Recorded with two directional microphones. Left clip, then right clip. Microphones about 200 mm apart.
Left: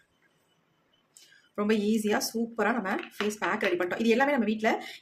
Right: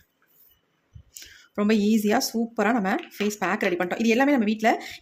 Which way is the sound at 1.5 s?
35° right (ahead or behind).